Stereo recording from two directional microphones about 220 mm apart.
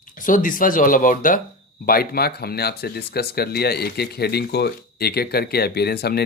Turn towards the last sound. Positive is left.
turn(degrees=45)  # may be behind; listen again after turning